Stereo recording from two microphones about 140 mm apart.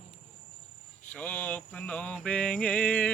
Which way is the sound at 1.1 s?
10° left (ahead or behind).